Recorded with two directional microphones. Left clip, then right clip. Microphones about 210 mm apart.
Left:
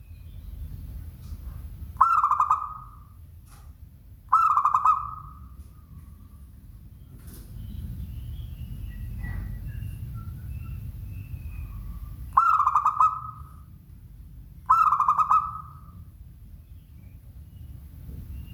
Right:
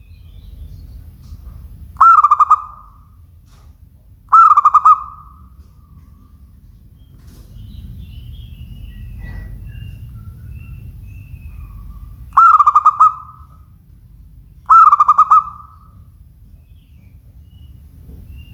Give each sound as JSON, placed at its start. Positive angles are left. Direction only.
{"t": 2.0, "sound": "owl", "side_deg": -15}
{"t": 4.3, "sound": "owl", "side_deg": -15}
{"t": 12.3, "sound": "owl", "side_deg": -20}
{"t": 14.7, "sound": "owl", "side_deg": -15}